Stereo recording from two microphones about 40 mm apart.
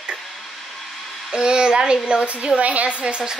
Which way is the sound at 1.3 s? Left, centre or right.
Right.